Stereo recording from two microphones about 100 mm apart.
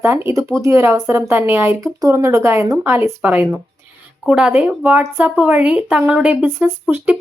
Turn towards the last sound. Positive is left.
turn(degrees=-20)  # may be behind; listen again after turning